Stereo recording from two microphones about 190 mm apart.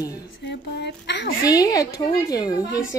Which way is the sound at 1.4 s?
20° left (ahead or behind).